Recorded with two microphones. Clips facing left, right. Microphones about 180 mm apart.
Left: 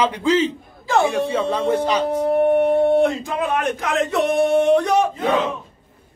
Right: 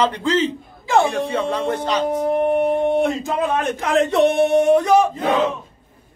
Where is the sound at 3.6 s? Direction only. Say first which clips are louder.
Right 3 dB; 30° right (ahead or behind).